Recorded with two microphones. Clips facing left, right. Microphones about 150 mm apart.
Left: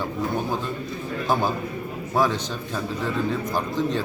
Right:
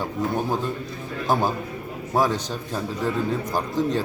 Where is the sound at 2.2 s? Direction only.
40° right (ahead or behind).